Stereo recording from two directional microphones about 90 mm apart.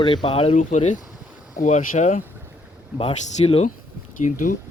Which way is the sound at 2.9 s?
90° left.